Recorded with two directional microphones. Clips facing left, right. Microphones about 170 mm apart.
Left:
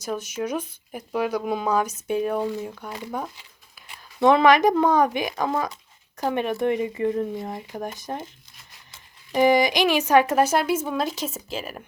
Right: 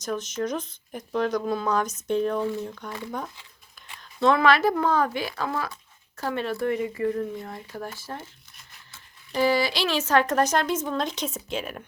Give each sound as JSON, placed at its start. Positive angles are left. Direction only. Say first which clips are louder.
{"t": 0.0, "sound": "a woman's voice", "louder": "even", "side_deg": 10}
{"t": 9.3, "sound": "speech", "louder": "left 4 dB", "side_deg": 15}